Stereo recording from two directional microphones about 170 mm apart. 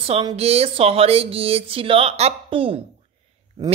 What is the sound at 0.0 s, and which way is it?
A woman's voice, 30° right (ahead or behind).